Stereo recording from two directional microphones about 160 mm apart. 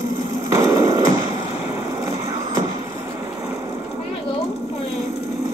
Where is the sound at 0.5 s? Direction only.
20° right (ahead or behind).